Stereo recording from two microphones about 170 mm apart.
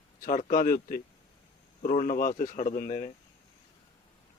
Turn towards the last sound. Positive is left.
turn(degrees=50)  # may be behind; listen again after turning